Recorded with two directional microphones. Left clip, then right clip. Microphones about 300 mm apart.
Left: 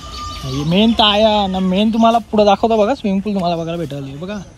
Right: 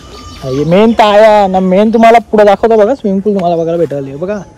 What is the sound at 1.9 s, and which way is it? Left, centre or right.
Speech, left.